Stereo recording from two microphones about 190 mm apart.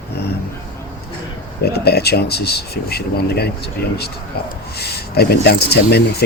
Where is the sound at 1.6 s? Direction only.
55° left (ahead or behind).